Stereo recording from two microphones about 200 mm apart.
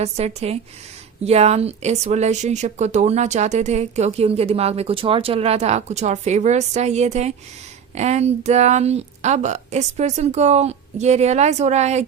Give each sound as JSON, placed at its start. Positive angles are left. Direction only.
{"t": 0.0, "sound": "speech", "side_deg": -30}